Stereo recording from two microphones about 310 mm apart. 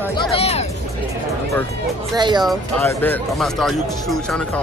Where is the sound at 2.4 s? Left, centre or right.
Centre.